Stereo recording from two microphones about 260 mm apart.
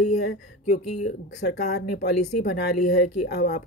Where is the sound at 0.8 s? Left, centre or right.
Left.